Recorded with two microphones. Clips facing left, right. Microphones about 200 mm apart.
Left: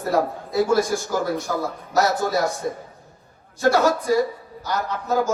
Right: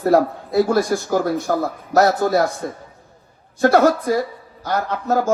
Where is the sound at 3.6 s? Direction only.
55° right (ahead or behind).